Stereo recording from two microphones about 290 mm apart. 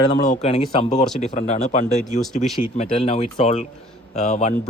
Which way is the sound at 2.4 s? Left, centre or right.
Centre.